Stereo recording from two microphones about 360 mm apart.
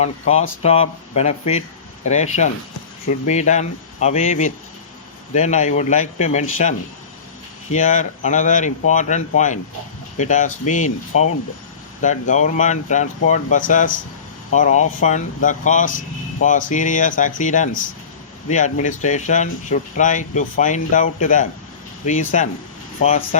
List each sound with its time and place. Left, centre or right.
0.0 s speech: centre